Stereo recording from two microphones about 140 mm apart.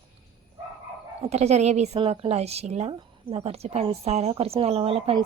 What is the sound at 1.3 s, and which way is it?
A woman's voice, 50° right (ahead or behind).